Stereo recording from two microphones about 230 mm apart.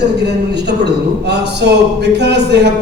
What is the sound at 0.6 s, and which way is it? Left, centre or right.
A man's voice, right.